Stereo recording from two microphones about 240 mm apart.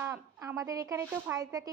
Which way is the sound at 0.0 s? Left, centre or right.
Centre.